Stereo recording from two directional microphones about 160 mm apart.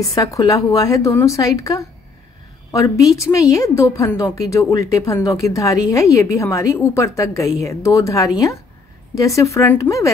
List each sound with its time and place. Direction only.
0.0 s a woman's voice: 20° left (ahead or behind)